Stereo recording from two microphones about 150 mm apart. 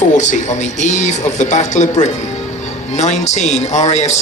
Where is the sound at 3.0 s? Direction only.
50° left (ahead or behind).